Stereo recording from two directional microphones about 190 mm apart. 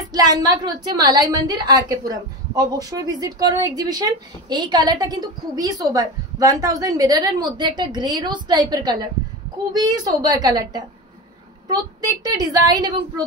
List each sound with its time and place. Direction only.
0.1 s a woman's voice: 20° right (ahead or behind)